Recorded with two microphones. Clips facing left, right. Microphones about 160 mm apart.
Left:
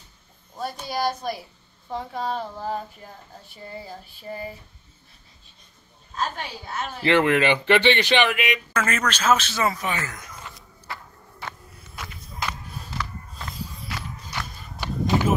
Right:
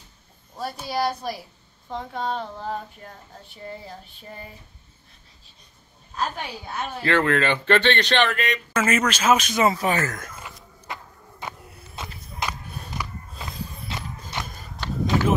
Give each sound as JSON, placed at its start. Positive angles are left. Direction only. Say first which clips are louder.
{"t": 0.6, "sound": "a sound", "louder": "right 1 dB", "side_deg": 0}
{"t": 7.0, "sound": "speech", "louder": "left 2 dB", "side_deg": 15}
{"t": 8.7, "sound": "speech", "louder": "right 6 dB", "side_deg": -10}
{"t": 9.8, "sound": "speech", "louder": "right 5 dB", "side_deg": -40}
{"t": 10.4, "sound": "walk", "louder": "right 1 dB", "side_deg": -15}
{"t": 12.4, "sound": "music", "louder": "right 1 dB", "side_deg": -15}
{"t": 13.8, "sound": "walk", "louder": "right 1 dB", "side_deg": -20}
{"t": 14.8, "sound": "a sound", "louder": "even", "side_deg": 15}